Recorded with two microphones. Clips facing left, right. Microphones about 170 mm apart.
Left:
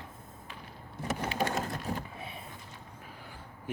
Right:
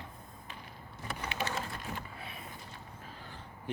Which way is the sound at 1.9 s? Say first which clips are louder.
Left 6 dB; 35° left (ahead or behind).